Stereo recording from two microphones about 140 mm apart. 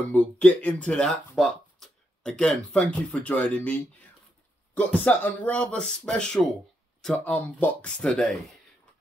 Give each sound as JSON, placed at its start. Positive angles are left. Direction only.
{"t": 0.1, "sound": "speech", "side_deg": 10}